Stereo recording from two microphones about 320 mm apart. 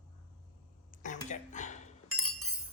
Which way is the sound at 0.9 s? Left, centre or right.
Left.